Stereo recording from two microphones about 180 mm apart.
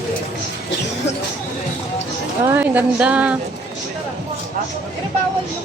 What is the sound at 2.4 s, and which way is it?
Speech, 10° right (ahead or behind).